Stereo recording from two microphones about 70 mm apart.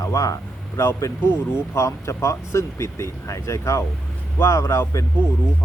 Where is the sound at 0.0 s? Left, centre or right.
Left.